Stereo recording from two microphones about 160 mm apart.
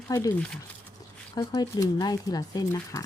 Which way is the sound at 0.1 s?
15° left (ahead or behind).